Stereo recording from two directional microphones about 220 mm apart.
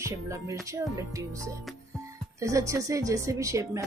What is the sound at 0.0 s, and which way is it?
Speech, 15° right (ahead or behind).